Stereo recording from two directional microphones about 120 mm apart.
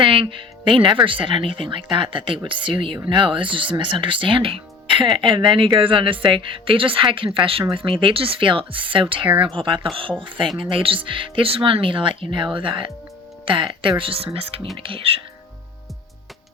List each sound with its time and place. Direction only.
0.0 s a woman's voice: 45° right (ahead or behind)